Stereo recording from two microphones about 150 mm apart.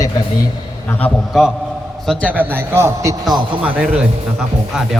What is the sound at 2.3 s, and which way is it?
Speech, 15° right (ahead or behind).